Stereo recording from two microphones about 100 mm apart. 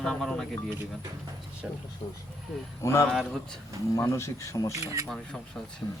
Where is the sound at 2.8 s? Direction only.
25° left (ahead or behind).